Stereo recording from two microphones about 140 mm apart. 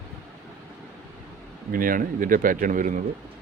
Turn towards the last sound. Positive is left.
turn(degrees=-70)  # may be behind; listen again after turning